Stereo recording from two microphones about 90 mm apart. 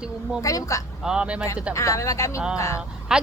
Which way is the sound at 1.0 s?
10° right (ahead or behind).